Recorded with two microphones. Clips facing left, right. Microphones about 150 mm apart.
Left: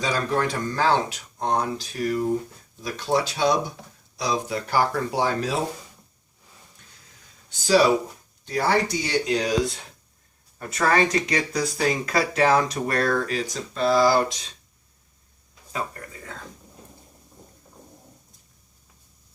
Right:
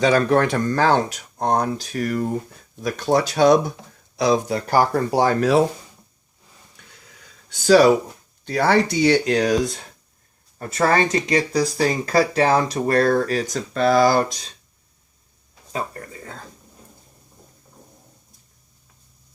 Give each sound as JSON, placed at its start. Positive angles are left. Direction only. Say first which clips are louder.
{"t": 0.0, "sound": "speech", "louder": "right 8 dB", "side_deg": -65}
{"t": 3.0, "sound": "speech", "louder": "right 6 dB", "side_deg": -45}
{"t": 6.7, "sound": "a sound", "louder": "right 5 dB", "side_deg": -70}
{"t": 8.4, "sound": "speech", "louder": "right 4 dB", "side_deg": -70}
{"t": 10.6, "sound": "speech", "louder": "right 3 dB", "side_deg": -35}
{"t": 13.7, "sound": "speech", "louder": "right 3 dB", "side_deg": -60}
{"t": 15.7, "sound": "speech", "louder": "right 3 dB", "side_deg": -35}